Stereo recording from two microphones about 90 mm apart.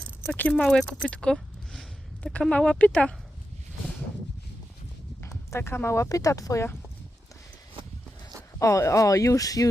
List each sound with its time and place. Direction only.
0.3 s speech: 20° left (ahead or behind)
0.6 s speech: 10° left (ahead or behind)
5.2 s speech: 30° left (ahead or behind)
8.5 s speech: 35° left (ahead or behind)